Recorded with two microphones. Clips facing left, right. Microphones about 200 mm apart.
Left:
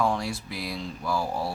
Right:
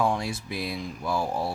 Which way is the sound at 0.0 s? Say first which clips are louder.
Even; 20° right (ahead or behind).